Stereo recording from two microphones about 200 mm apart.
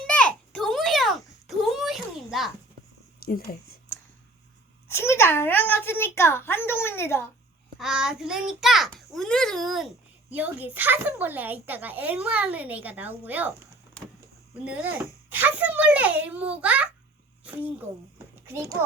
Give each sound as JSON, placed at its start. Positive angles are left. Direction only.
{"t": 0.1, "sound": "a sound", "side_deg": 5}
{"t": 3.2, "sound": "speech", "side_deg": 50}
{"t": 4.9, "sound": "a woman's voice", "side_deg": 15}
{"t": 7.8, "sound": "a child's voice", "side_deg": -5}
{"t": 14.6, "sound": "a child's voice", "side_deg": -10}